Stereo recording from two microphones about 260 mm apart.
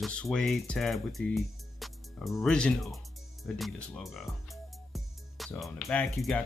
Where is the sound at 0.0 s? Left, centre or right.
Centre.